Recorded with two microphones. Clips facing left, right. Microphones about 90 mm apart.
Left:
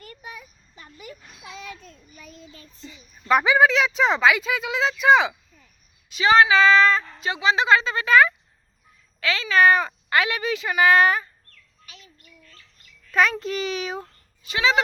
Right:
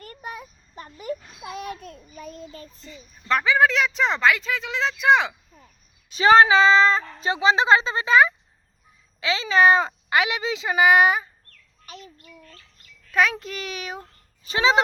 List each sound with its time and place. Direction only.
0.0 s a sound: 45° right (ahead or behind)
2.8 s a woman's voice: 5° left (ahead or behind)
3.6 s speech: centre (ahead or behind)
6.1 s speech: 35° right (ahead or behind); by 11.3 s 15° right (ahead or behind)
11.9 s speech: 40° right (ahead or behind)
13.1 s a sound: centre (ahead or behind)
13.4 s speech: centre (ahead or behind)
14.4 s speech: 35° right (ahead or behind)